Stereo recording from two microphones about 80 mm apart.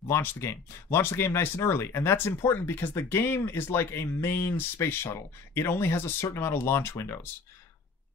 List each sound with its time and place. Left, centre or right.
0.1 s speech: left